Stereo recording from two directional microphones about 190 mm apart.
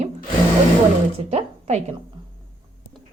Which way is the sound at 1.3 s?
35° right (ahead or behind).